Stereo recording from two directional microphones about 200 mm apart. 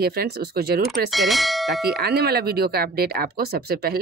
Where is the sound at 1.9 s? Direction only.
50° right (ahead or behind).